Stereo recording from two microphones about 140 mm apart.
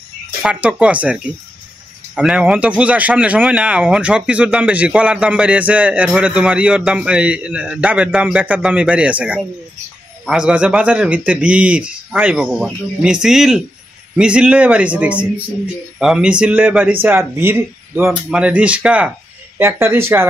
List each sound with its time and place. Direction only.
0.4 s speech: 10° right (ahead or behind)